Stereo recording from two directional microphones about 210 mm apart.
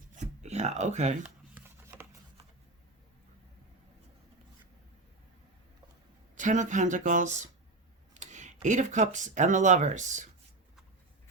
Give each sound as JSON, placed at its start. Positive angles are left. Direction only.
{"t": 0.4, "sound": "speech", "side_deg": -35}
{"t": 6.3, "sound": "speech", "side_deg": -35}